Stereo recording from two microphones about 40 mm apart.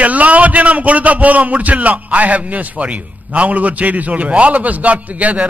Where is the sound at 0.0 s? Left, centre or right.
Right.